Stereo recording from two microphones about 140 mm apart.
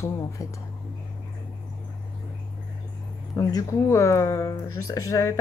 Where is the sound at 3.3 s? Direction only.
20° left (ahead or behind).